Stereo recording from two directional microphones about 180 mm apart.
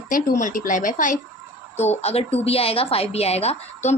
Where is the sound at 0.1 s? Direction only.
45° left (ahead or behind).